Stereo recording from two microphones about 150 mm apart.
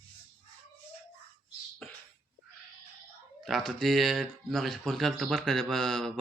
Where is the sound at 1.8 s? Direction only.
Centre (ahead or behind).